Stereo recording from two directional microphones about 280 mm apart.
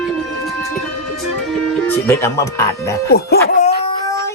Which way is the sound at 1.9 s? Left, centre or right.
Centre.